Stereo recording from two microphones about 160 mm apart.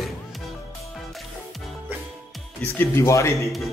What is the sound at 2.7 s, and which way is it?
Speech, 15° left (ahead or behind).